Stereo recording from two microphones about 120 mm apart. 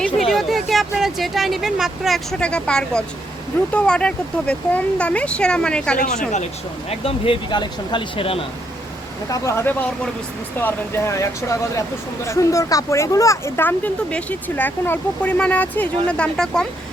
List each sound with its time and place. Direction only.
0.0 s speech: centre (ahead or behind)
7.0 s speech: 45° left (ahead or behind)
9.3 s speech: 25° left (ahead or behind); by 16.6 s 5° left (ahead or behind)